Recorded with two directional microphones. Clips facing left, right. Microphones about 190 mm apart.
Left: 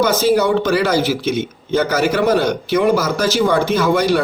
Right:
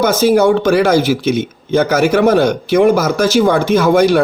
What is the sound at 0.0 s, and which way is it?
A man's voice, 50° right (ahead or behind).